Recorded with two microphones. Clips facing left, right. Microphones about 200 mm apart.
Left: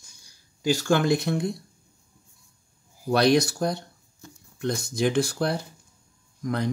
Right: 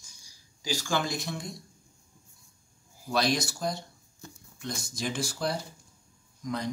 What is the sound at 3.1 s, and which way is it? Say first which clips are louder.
Speech: left 8 dB; 60° left (ahead or behind).